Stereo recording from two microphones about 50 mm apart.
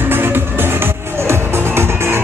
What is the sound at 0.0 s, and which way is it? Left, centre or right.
Music, right.